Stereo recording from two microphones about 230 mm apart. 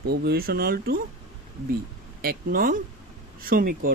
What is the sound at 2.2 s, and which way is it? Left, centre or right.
Speech, right.